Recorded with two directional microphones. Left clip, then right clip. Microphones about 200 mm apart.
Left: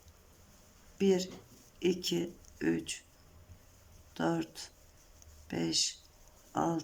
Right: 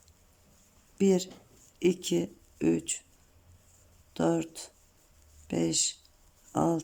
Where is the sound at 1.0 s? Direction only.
20° right (ahead or behind).